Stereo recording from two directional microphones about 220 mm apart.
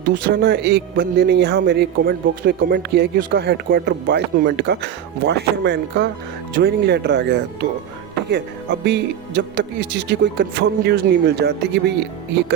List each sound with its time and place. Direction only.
0.1 s speech: 50° right (ahead or behind)